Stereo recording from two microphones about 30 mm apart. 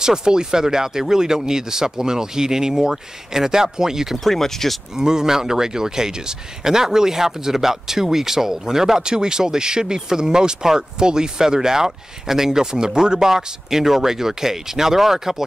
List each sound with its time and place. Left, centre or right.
0.0 s speech: right
4.2 s speech: centre
4.9 s speech: centre